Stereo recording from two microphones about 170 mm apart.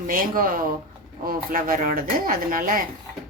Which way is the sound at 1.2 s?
55° right (ahead or behind).